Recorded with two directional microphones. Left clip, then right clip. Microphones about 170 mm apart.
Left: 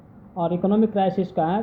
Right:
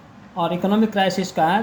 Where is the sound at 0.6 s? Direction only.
10° left (ahead or behind).